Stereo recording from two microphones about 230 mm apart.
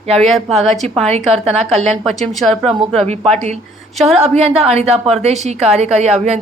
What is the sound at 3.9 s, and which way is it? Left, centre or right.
Speech, centre.